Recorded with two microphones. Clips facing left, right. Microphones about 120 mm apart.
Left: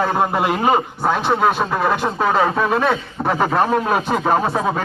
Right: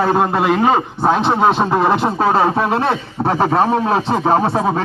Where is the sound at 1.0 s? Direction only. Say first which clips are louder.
Right 3 dB; 25° right (ahead or behind).